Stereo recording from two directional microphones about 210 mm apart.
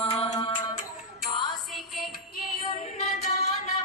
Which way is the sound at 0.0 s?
30° left (ahead or behind).